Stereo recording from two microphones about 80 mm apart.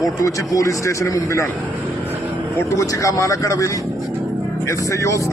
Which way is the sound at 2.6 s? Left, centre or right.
Left.